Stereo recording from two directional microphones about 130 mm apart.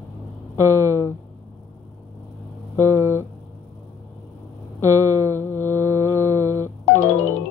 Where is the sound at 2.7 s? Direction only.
20° left (ahead or behind).